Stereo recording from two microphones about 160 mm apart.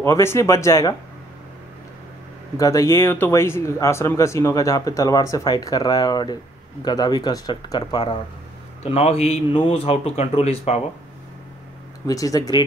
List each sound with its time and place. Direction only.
0.0 s speech: 15° left (ahead or behind)
2.5 s speech: 20° left (ahead or behind)
8.8 s a man's voice: 40° left (ahead or behind)
12.1 s speech: 20° left (ahead or behind)